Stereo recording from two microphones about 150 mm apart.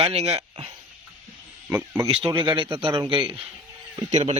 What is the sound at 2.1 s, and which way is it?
A man's voice, 35° right (ahead or behind).